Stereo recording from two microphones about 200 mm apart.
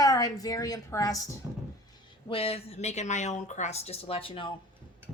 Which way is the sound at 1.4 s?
10° right (ahead or behind).